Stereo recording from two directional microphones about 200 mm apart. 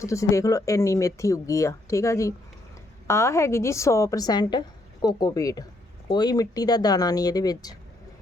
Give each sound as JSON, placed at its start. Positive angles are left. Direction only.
{"t": 0.0, "sound": "speech", "side_deg": 15}